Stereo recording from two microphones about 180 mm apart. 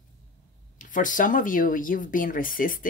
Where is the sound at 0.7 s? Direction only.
45° left (ahead or behind).